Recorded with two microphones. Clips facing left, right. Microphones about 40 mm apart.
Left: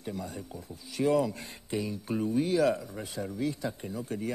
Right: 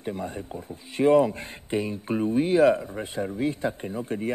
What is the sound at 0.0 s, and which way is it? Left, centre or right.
A man's voice, right.